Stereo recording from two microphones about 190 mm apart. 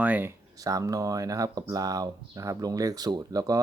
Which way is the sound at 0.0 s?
10° right (ahead or behind).